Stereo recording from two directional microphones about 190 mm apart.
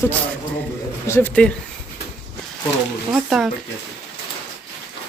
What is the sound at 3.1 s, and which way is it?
Speech, centre (ahead or behind).